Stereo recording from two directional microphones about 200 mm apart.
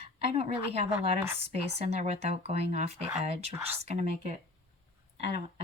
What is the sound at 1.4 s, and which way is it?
Speech, 30° right (ahead or behind).